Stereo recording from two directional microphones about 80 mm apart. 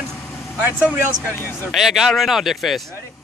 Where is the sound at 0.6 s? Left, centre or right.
Centre.